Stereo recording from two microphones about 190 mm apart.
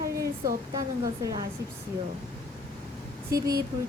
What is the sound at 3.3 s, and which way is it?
Speech, 15° right (ahead or behind).